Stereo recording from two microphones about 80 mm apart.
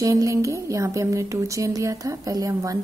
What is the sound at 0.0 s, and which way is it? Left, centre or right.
A woman's voice, right.